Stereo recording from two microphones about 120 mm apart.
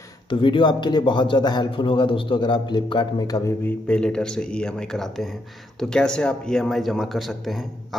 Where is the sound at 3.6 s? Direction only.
15° left (ahead or behind).